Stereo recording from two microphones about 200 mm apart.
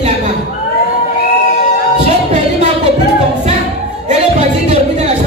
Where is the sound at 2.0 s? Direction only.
35° right (ahead or behind).